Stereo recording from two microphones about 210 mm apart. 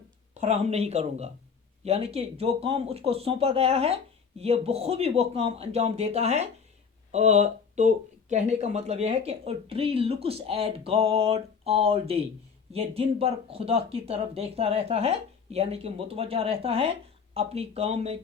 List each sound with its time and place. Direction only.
0.3 s speech: 30° right (ahead or behind)